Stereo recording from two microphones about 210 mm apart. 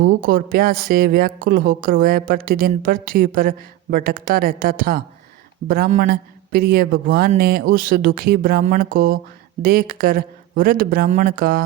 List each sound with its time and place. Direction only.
0.0 s a man's voice: 45° right (ahead or behind)